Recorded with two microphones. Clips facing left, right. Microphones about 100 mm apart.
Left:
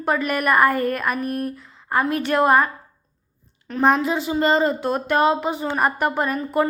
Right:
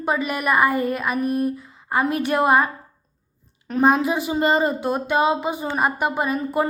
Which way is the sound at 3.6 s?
15° right (ahead or behind).